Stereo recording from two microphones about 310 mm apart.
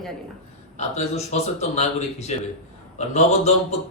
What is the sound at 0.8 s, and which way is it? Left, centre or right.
A man's voice, left.